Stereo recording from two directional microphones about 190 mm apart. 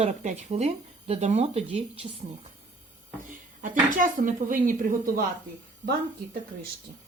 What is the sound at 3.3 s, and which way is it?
A woman's voice, 45° right (ahead or behind).